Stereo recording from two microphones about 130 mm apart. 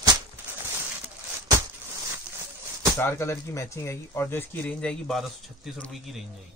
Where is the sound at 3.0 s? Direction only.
20° left (ahead or behind).